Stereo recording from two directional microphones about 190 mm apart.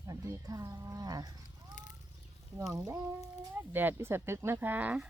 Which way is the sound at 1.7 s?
40° left (ahead or behind).